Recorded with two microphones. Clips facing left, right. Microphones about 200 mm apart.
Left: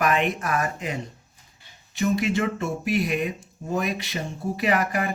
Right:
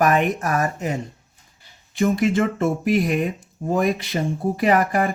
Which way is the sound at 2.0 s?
50° right (ahead or behind).